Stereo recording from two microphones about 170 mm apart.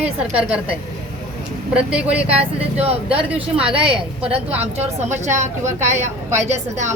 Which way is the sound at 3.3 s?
5° right (ahead or behind).